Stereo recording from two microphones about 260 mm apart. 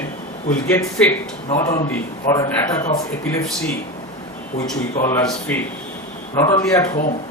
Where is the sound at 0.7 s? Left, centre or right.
Centre.